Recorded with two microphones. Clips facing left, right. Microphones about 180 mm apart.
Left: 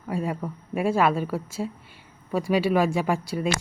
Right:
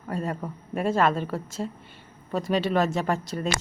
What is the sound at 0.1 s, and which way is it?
A man's voice, 10° left (ahead or behind).